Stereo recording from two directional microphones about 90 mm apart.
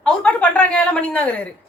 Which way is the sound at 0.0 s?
10° left (ahead or behind).